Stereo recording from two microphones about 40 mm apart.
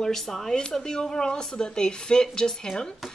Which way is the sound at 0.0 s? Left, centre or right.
Centre.